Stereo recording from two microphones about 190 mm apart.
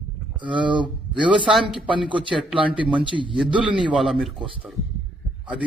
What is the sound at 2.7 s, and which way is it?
Speech, 25° right (ahead or behind).